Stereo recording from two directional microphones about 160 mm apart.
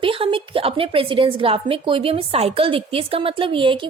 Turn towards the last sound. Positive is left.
turn(degrees=-30)  # may be behind; listen again after turning